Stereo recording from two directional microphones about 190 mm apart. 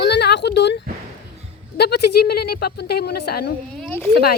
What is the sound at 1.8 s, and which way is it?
A woman's voice, 55° left (ahead or behind).